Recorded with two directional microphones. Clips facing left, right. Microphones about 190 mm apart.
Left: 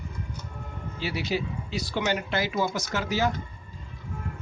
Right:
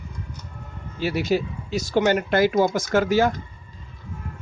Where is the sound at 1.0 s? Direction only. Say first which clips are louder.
Right 7 dB; 50° right (ahead or behind).